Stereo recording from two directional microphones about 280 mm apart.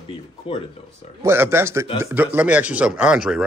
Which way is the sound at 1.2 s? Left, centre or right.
Centre.